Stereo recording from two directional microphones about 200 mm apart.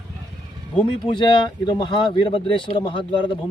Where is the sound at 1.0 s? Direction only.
25° left (ahead or behind).